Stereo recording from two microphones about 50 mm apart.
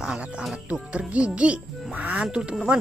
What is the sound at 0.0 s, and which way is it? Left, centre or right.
Speech, centre.